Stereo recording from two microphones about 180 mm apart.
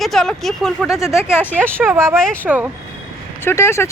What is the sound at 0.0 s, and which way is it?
Speech, centre (ahead or behind).